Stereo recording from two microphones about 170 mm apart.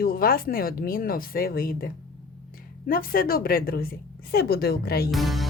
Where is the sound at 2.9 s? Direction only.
60° left (ahead or behind).